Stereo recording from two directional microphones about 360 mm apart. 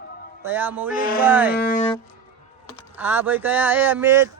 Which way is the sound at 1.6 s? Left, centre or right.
Centre.